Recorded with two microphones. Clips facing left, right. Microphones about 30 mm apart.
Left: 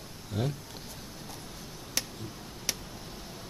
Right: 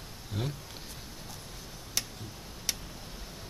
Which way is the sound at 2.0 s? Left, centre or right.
Centre.